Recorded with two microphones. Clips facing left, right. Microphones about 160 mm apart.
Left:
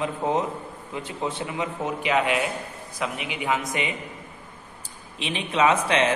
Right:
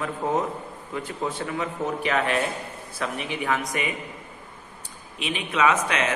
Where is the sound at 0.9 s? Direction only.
20° left (ahead or behind).